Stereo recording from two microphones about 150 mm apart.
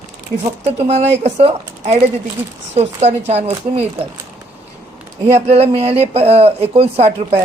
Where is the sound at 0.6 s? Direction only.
45° right (ahead or behind).